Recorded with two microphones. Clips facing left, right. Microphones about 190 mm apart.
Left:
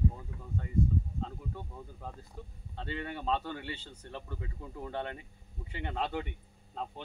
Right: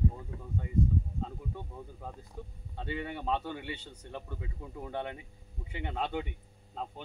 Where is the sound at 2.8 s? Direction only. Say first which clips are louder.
Right 1 dB; 10° right (ahead or behind).